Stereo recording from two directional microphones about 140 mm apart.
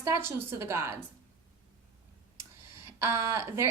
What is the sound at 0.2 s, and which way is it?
Speech, 15° right (ahead or behind).